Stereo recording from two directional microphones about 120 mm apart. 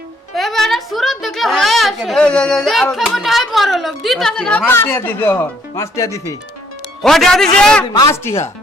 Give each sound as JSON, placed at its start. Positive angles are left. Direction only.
{"t": 0.3, "sound": "a woman's voice", "side_deg": 0}
{"t": 7.0, "sound": "a man's voice", "side_deg": 5}
{"t": 7.9, "sound": "speech", "side_deg": 25}